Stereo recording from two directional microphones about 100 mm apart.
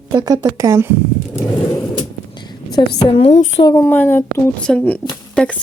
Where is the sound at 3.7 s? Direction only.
25° left (ahead or behind).